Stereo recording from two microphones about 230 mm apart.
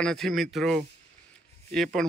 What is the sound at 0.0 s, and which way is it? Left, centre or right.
Speech, centre.